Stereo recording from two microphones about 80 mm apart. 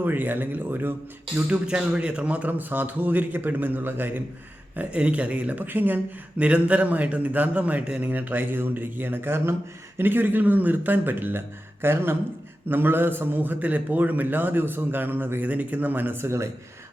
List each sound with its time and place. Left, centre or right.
0.0 s a man's voice: right
1.5 s a man's voice: centre; by 16.5 s right